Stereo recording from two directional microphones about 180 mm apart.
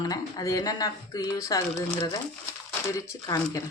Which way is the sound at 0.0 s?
20° left (ahead or behind).